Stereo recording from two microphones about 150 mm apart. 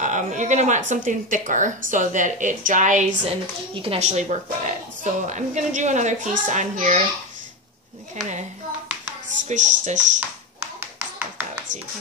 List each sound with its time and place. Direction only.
0.0 s speech: 55° right (ahead or behind)
3.3 s a woman's voice: 40° right (ahead or behind); by 7.0 s 55° right (ahead or behind)
9.4 s speech: 55° right (ahead or behind)